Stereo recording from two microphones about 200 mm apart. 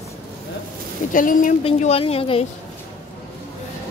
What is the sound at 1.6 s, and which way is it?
Speech, 30° left (ahead or behind).